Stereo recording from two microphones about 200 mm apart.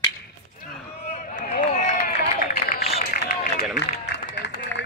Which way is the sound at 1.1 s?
40° left (ahead or behind).